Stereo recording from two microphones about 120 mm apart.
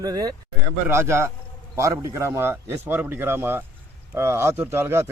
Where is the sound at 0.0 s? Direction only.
30° right (ahead or behind).